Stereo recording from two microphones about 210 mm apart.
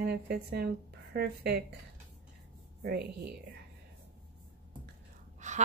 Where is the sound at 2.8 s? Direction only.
50° right (ahead or behind).